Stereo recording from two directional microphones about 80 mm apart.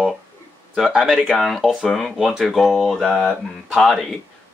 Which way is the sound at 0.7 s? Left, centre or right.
Centre.